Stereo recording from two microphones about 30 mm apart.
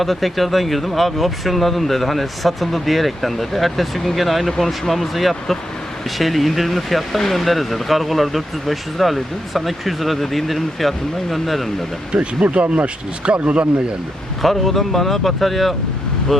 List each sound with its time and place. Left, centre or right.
0.0 s speech: centre
12.1 s a man's voice: right
14.4 s speech: centre